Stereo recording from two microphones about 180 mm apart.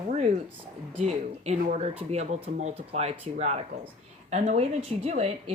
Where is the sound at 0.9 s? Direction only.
35° right (ahead or behind).